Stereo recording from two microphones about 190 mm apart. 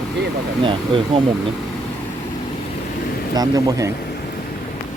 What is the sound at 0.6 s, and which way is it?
Speech, 25° right (ahead or behind).